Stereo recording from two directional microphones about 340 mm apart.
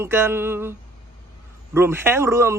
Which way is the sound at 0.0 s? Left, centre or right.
Centre.